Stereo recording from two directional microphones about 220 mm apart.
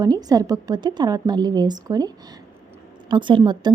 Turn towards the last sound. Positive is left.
turn(degrees=-20)  # may be behind; listen again after turning